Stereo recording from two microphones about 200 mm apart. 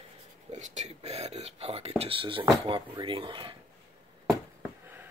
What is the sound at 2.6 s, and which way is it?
Speech, 25° right (ahead or behind).